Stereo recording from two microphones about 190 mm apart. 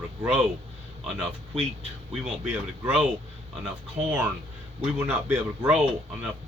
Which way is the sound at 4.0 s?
35° right (ahead or behind).